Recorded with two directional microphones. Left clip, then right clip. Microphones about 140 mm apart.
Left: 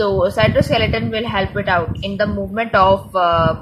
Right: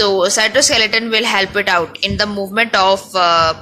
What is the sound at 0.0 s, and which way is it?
A woman's voice, 5° right (ahead or behind).